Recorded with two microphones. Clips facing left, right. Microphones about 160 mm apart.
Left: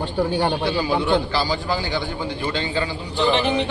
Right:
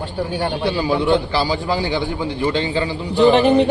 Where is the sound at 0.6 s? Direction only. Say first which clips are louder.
Right 3 dB; 30° right (ahead or behind).